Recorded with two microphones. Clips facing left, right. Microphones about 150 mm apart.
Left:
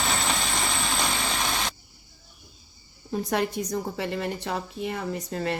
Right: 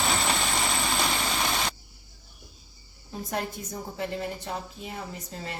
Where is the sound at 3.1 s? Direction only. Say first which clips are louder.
Left 6 dB; 75° left (ahead or behind).